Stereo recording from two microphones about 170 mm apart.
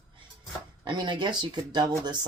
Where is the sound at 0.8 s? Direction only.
25° right (ahead or behind).